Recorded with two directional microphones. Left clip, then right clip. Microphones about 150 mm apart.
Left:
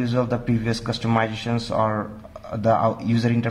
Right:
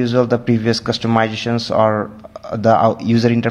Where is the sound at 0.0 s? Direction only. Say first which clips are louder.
Right 8 dB; 35° right (ahead or behind).